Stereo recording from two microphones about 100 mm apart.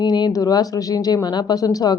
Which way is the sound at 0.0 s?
45° left (ahead or behind).